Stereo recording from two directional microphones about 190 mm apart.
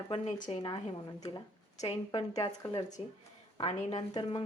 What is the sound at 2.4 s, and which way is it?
Speech, 15° left (ahead or behind).